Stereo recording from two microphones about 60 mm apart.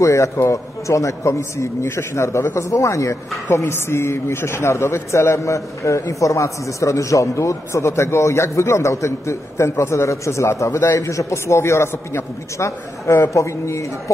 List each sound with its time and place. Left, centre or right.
0.0 s a man's voice: left
3.5 s a man's voice: left